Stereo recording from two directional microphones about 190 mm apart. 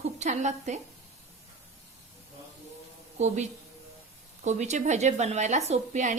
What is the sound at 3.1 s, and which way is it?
A woman's voice, 35° right (ahead or behind).